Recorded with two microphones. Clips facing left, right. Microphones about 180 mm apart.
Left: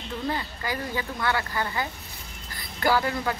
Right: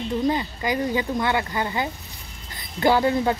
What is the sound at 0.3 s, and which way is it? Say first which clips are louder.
Speech: right 6 dB; 20° right (ahead or behind).